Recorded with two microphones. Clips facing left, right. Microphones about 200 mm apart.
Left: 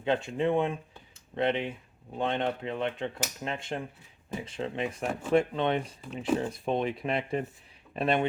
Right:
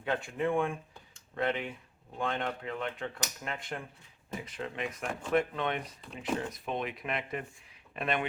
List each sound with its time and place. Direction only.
0.0 s speech: 25° left (ahead or behind)
6.0 s speech: centre (ahead or behind)
6.3 s speech: 30° left (ahead or behind)